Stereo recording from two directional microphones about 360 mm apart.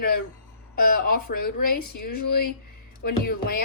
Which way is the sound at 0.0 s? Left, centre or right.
Left.